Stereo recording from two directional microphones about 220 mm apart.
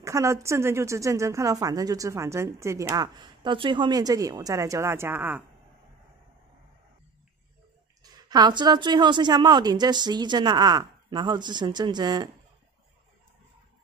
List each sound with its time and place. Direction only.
0.0 s speech: 15° right (ahead or behind)
8.0 s speech: 20° right (ahead or behind)